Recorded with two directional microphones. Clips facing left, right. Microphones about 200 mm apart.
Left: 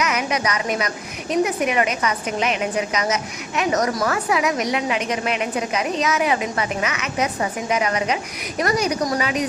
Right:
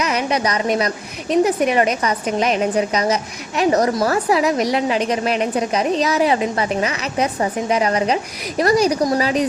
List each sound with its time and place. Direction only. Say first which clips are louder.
0.0 s a woman's voice: right 3 dB; 30° right (ahead or behind)